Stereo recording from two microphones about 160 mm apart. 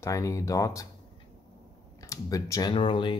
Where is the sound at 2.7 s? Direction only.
30° left (ahead or behind).